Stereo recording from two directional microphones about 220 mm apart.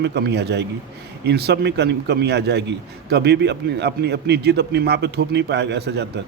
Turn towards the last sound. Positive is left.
turn(degrees=-50)  # may be behind; listen again after turning